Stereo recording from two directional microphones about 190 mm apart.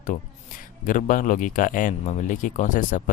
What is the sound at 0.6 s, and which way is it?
Speech, 45° left (ahead or behind).